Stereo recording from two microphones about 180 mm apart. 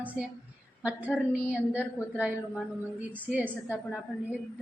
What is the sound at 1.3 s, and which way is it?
Speech, 5° right (ahead or behind).